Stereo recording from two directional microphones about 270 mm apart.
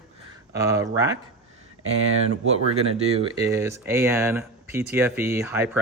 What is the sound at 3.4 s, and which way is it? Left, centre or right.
Speech, centre.